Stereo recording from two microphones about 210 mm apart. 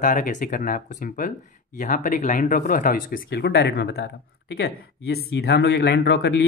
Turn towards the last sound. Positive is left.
turn(degrees=50)  # may be behind; listen again after turning